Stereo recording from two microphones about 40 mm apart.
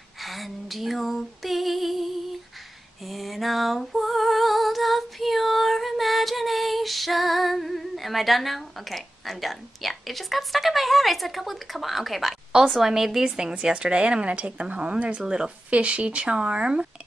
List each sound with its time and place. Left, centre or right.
0.2 s female singing: centre
12.7 s a woman's voice: centre
13.2 s a woman's voice: right
15.2 s a woman's voice: centre
15.7 s speech: right